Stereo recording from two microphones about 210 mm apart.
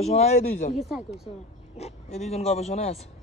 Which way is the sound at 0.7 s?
Centre (ahead or behind).